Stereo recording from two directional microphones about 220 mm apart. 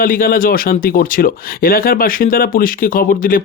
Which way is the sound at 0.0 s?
40° left (ahead or behind).